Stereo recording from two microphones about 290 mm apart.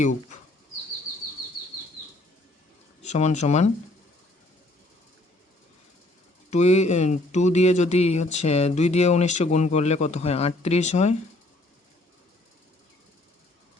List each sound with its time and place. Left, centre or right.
3.0 s speech: left
6.5 s speech: left